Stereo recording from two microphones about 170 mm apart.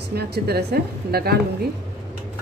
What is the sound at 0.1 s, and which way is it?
A woman's voice, 70° right (ahead or behind).